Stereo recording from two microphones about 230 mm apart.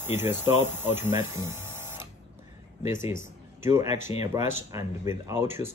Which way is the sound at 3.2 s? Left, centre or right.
Centre.